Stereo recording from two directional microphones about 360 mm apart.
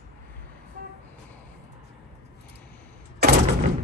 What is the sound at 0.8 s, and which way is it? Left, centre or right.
Vehicle, right.